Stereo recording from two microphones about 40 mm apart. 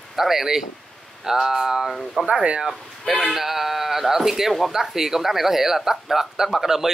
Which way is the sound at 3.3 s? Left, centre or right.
Centre.